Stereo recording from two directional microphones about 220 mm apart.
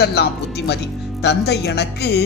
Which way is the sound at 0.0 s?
50° left (ahead or behind).